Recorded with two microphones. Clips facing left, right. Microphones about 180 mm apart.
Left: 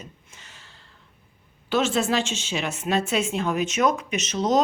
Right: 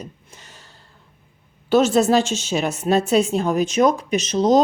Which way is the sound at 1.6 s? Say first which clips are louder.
Right 7 dB; 40° right (ahead or behind).